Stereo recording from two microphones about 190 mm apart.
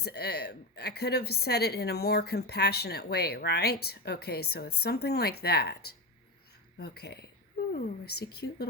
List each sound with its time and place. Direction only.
0.0 s a woman's voice: 55° left (ahead or behind)